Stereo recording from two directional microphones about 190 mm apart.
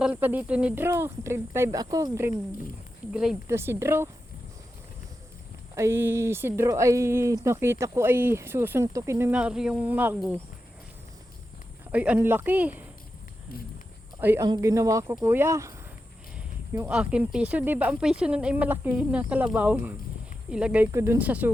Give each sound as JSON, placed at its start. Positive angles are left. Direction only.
{"t": 0.0, "sound": "speech", "side_deg": -10}
{"t": 3.1, "sound": "speech", "side_deg": -5}
{"t": 5.7, "sound": "speech", "side_deg": -15}
{"t": 11.9, "sound": "speech", "side_deg": -10}
{"t": 14.2, "sound": "speech", "side_deg": -10}